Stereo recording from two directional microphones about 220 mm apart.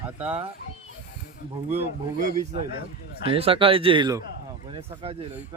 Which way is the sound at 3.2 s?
25° right (ahead or behind).